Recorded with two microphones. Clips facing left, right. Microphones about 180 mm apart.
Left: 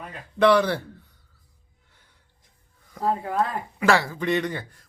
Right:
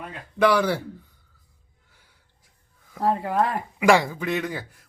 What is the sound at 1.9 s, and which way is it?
Gasp, 10° right (ahead or behind).